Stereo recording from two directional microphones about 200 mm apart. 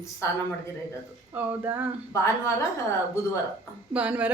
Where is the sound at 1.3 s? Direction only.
10° right (ahead or behind).